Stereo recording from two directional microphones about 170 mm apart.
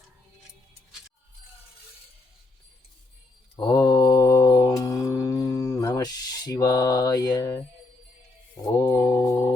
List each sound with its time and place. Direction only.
3.5 s mantra: 20° left (ahead or behind)
8.8 s mantra: 15° left (ahead or behind)